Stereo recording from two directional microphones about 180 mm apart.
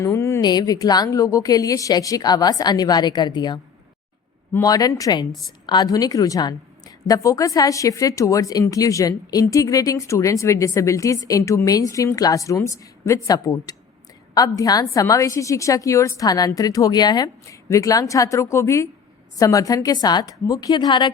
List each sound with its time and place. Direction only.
0.0 s a woman's voice: 15° left (ahead or behind)